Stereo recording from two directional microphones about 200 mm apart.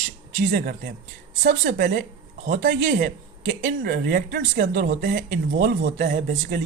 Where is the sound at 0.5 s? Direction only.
45° right (ahead or behind).